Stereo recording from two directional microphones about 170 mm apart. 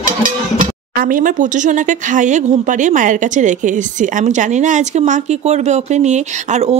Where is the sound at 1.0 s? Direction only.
55° right (ahead or behind).